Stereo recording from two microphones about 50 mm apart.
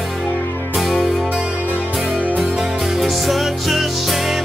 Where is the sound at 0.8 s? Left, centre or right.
Centre.